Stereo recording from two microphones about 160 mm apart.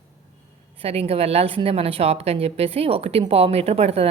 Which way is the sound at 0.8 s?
40° right (ahead or behind).